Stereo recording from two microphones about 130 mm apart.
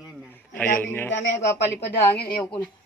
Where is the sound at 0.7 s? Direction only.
15° left (ahead or behind).